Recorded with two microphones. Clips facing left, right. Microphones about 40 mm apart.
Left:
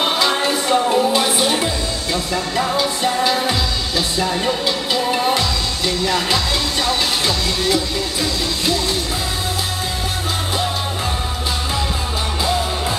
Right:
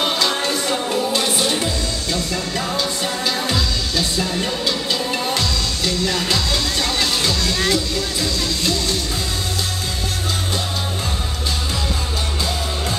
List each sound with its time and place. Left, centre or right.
0.0 s music: centre
7.7 s speech: centre